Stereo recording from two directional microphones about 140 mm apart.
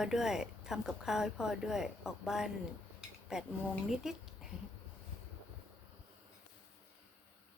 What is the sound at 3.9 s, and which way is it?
Speech, 5° right (ahead or behind).